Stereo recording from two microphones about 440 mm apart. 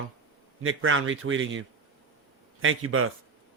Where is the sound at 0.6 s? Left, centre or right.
Right.